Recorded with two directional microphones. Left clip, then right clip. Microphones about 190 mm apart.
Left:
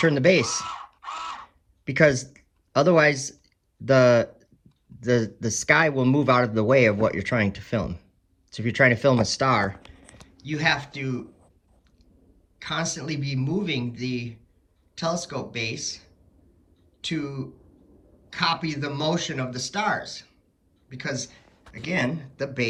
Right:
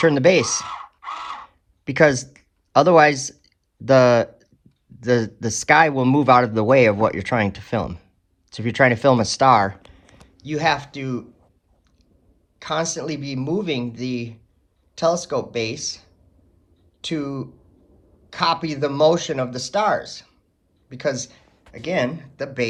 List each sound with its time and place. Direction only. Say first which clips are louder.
0.0 s speech: right 4 dB; 20° right (ahead or behind)
1.8 s speech: right 3 dB; 20° right (ahead or behind)
12.5 s speech: right 5 dB; 15° right (ahead or behind)